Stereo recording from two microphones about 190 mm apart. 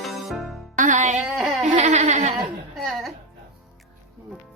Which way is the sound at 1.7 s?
40° right (ahead or behind).